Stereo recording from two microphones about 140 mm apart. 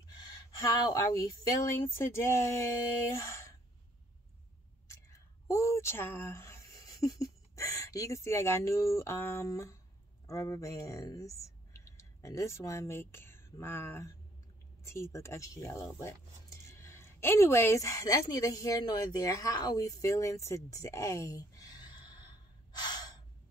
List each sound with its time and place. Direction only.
0.8 s speech: 25° left (ahead or behind)
4.8 s a woman's voice: 20° left (ahead or behind)